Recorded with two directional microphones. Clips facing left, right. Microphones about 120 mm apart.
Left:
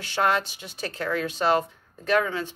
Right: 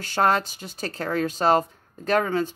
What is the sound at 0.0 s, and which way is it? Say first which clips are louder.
Speech: right 2 dB; 40° right (ahead or behind).